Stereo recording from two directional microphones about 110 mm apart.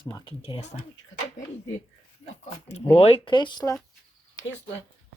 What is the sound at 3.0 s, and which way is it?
Speech, 60° left (ahead or behind).